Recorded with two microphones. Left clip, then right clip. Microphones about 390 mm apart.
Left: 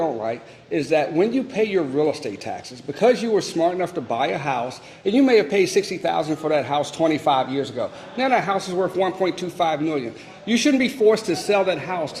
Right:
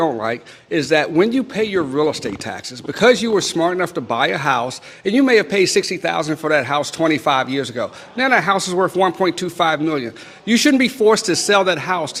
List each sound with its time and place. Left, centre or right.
0.0 s a man's voice: right